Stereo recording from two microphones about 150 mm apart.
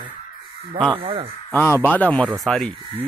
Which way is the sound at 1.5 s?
10° left (ahead or behind).